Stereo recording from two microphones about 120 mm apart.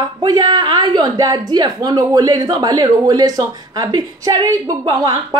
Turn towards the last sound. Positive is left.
turn(degrees=-30)  # may be behind; listen again after turning